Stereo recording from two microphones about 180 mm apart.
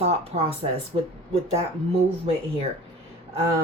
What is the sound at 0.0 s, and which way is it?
Speech, 35° right (ahead or behind).